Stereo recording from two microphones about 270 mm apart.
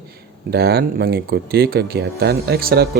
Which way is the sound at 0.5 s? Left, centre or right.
Right.